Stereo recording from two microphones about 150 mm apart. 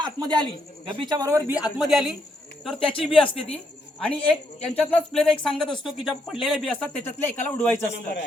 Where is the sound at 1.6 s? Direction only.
Centre (ahead or behind).